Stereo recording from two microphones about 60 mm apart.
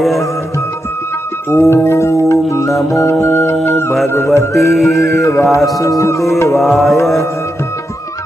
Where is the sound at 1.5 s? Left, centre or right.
Left.